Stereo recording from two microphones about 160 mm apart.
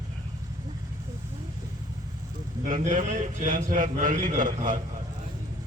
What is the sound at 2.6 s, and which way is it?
A man's voice, 55° right (ahead or behind).